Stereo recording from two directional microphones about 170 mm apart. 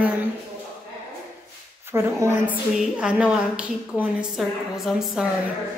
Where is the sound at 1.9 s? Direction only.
15° right (ahead or behind).